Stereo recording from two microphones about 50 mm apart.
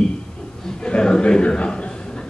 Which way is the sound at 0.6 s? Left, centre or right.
Centre.